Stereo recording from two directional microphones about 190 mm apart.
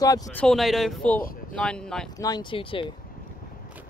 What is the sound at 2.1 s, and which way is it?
Speech, 20° left (ahead or behind).